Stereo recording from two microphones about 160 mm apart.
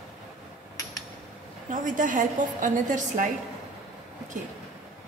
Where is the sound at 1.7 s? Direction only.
55° right (ahead or behind).